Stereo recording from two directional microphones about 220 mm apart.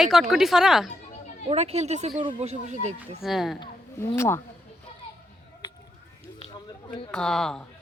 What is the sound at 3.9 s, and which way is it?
Speech, 10° left (ahead or behind).